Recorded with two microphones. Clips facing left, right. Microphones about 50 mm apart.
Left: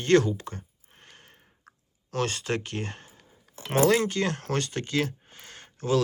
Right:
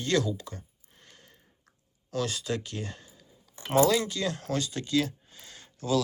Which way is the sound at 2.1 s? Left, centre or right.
Left.